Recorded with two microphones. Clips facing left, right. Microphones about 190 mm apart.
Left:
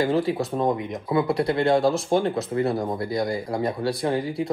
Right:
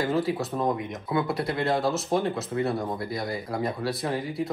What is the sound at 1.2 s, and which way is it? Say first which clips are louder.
Speech: left 5 dB; centre (ahead or behind).